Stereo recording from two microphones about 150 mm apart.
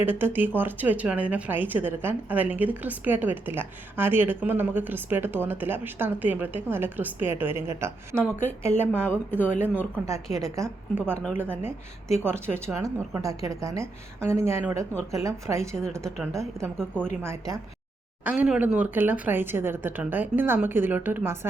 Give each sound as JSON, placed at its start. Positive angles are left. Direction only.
{"t": 0.0, "sound": "a woman's voice", "side_deg": -15}
{"t": 16.7, "sound": "a woman's voice", "side_deg": 5}
{"t": 17.2, "sound": "a woman's voice", "side_deg": -25}
{"t": 18.3, "sound": "a woman's voice", "side_deg": -10}